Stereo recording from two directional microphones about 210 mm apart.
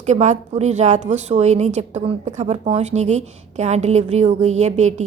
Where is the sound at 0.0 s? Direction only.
35° right (ahead or behind).